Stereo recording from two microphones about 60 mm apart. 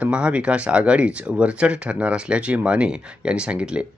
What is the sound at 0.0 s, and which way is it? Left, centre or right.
Speech, centre.